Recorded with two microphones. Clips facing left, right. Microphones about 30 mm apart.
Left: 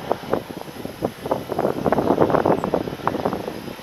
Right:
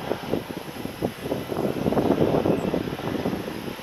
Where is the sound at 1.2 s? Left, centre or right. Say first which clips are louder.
Left 6 dB; left.